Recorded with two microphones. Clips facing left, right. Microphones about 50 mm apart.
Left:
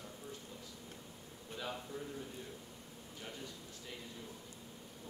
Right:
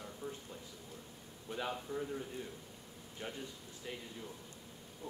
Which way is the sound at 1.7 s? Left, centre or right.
Centre.